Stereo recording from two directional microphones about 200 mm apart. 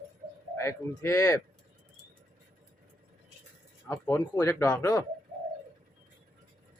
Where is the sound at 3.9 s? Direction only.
10° left (ahead or behind).